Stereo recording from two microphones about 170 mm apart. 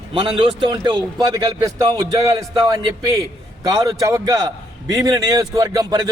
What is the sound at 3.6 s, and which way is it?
A man's voice, 20° right (ahead or behind).